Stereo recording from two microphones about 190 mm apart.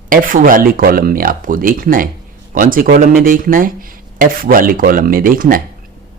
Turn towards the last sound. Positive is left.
turn(degrees=-50)  # may be behind; listen again after turning